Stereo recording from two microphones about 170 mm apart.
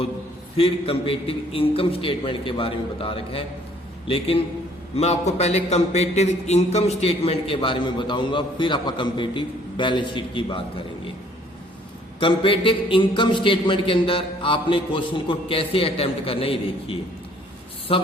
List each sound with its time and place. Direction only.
0.5 s speech: 35° left (ahead or behind)
12.2 s speech: 30° left (ahead or behind)